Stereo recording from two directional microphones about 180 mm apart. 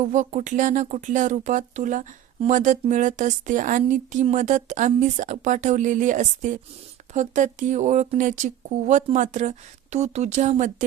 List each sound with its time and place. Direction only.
0.1 s speech: 40° right (ahead or behind)